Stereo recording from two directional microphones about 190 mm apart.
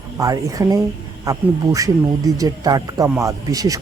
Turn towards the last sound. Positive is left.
turn(degrees=-20)  # may be behind; listen again after turning